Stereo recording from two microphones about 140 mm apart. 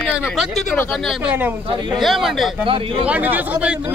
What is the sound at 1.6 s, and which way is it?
Speech, 35° right (ahead or behind).